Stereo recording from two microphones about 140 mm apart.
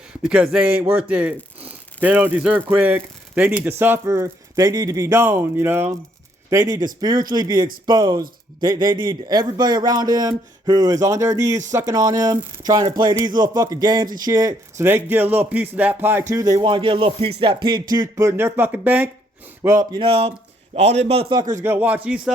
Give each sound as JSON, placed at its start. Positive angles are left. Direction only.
{"t": 0.3, "sound": "a man's voice", "side_deg": -5}
{"t": 6.5, "sound": "a man's voice", "side_deg": -25}
{"t": 7.9, "sound": "a sound", "side_deg": -30}
{"t": 8.6, "sound": "a man's voice", "side_deg": -30}
{"t": 16.6, "sound": "a sound", "side_deg": -35}
{"t": 19.6, "sound": "a man's voice", "side_deg": -20}
{"t": 20.0, "sound": "a man's voice", "side_deg": -45}
{"t": 21.6, "sound": "speech", "side_deg": -15}